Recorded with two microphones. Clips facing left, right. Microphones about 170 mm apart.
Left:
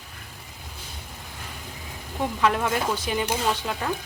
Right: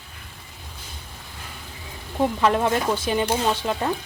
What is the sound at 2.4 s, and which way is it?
Speech, 35° right (ahead or behind).